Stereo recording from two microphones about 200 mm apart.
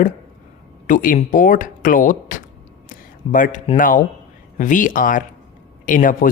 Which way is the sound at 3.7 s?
40° left (ahead or behind).